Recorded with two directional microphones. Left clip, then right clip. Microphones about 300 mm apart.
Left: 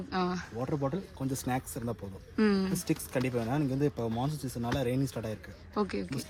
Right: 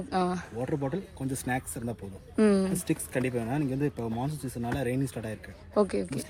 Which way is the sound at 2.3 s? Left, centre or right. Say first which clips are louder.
Right 5 dB; centre.